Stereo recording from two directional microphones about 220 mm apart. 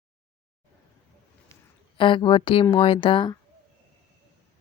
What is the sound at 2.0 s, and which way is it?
Speech, 20° left (ahead or behind).